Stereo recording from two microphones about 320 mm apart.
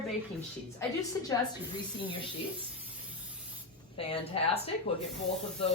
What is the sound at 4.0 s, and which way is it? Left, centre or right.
Speech, centre.